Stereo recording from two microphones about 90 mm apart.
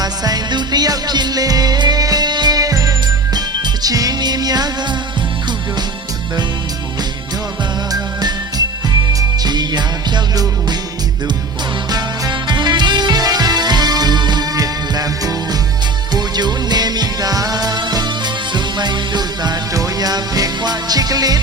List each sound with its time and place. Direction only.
0.0 s music: 50° right (ahead or behind)
8.2 s music: 50° right (ahead or behind)
11.9 s music: 50° right (ahead or behind)